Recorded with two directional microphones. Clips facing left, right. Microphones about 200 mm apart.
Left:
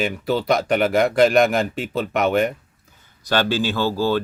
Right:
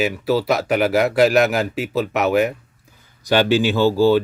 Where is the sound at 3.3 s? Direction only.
15° right (ahead or behind).